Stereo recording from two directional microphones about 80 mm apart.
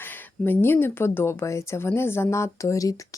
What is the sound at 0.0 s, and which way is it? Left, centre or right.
A woman's voice, left.